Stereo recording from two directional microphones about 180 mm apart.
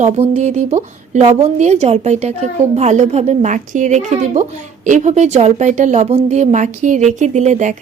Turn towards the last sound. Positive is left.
turn(degrees=-40)  # may be behind; listen again after turning